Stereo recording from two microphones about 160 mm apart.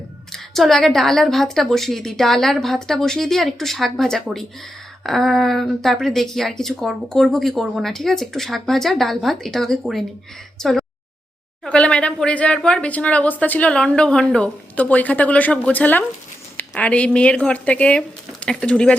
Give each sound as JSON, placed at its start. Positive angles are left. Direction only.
{"t": 0.3, "sound": "speech", "side_deg": 0}
{"t": 10.6, "sound": "a sound", "side_deg": 0}
{"t": 11.6, "sound": "speech", "side_deg": 5}